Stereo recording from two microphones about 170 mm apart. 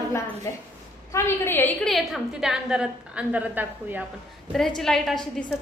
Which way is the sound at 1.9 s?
Centre (ahead or behind).